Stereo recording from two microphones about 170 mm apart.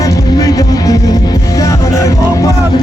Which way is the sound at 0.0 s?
20° left (ahead or behind).